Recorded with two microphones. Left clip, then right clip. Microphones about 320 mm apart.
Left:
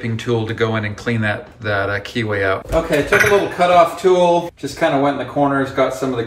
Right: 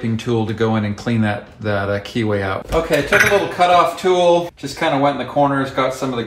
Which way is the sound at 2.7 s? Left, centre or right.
Centre.